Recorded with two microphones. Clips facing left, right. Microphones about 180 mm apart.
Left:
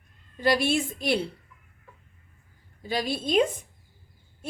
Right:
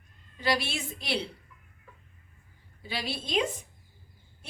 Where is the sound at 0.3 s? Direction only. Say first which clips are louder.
Left 7 dB; 50° left (ahead or behind).